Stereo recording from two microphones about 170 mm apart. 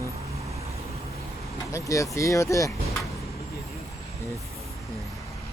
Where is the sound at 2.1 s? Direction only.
15° left (ahead or behind).